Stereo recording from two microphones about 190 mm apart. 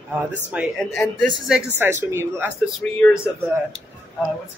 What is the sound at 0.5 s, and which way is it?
Speech, 5° right (ahead or behind).